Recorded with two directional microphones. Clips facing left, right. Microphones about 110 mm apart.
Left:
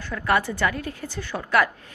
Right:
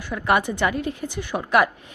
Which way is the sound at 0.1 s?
20° right (ahead or behind).